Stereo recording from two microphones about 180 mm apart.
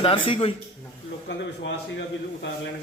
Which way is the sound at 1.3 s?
80° left.